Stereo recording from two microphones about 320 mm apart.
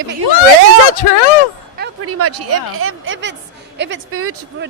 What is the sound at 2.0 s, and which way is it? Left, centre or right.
A woman's voice, right.